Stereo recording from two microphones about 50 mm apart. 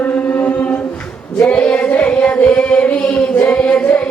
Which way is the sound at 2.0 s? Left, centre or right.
Left.